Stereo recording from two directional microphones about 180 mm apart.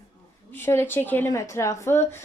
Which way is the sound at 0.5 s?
15° left (ahead or behind).